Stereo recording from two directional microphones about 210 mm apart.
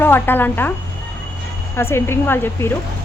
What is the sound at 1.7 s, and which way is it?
Speech, 10° left (ahead or behind).